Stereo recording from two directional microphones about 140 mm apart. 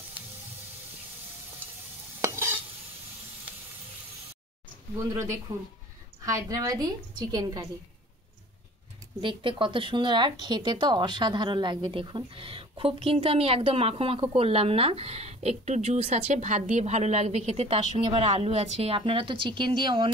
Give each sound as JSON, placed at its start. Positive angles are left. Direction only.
{"t": 2.2, "sound": "stir", "side_deg": -20}
{"t": 5.5, "sound": "a woman's voice", "side_deg": -30}
{"t": 9.2, "sound": "speech", "side_deg": -35}